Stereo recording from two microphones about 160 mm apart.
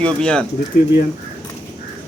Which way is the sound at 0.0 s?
5° left (ahead or behind).